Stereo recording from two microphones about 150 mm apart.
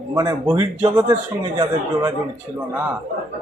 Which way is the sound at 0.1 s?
25° right (ahead or behind).